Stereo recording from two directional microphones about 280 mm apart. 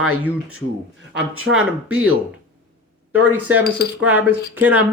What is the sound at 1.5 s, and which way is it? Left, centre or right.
Speech, centre.